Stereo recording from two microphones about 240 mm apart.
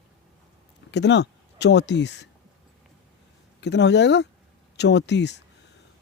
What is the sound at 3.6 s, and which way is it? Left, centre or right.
Speech, left.